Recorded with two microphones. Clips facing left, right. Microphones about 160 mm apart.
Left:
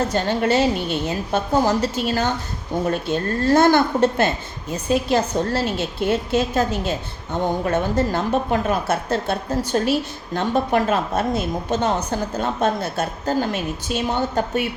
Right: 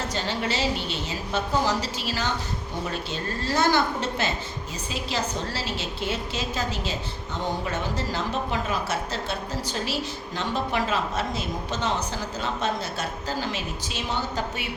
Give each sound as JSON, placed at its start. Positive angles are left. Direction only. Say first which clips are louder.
{"t": 0.1, "sound": "a woman's voice", "louder": "left 9 dB", "side_deg": 50}